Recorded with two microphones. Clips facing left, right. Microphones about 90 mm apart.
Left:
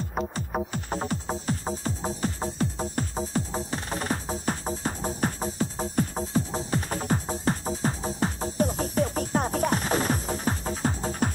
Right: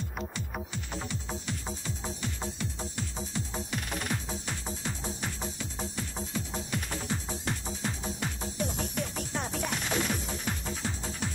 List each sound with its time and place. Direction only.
0.1 s music: 40° left (ahead or behind)